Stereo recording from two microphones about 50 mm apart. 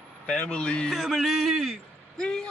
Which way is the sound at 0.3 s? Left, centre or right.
Left.